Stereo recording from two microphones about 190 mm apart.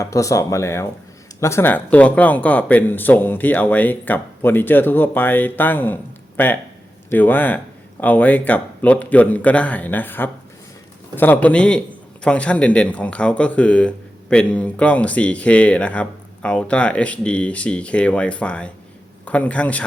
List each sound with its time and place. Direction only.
0.0 s speech: 15° left (ahead or behind)